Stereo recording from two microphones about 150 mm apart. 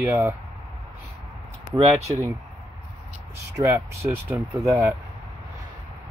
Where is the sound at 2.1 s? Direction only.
20° right (ahead or behind).